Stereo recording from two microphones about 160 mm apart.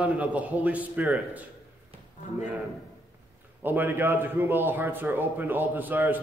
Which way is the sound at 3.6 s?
10° right (ahead or behind).